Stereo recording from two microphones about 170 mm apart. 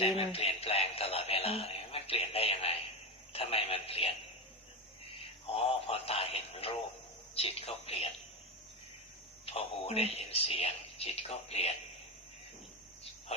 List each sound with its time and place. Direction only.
0.3 s a sound: 35° left (ahead or behind)
3.3 s a man's voice: 35° left (ahead or behind)
5.5 s radio: 35° left (ahead or behind)
7.3 s speech: 35° left (ahead or behind)
9.5 s speech: 35° left (ahead or behind)